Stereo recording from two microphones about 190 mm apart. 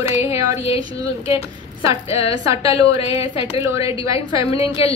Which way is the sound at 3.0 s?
30° left (ahead or behind).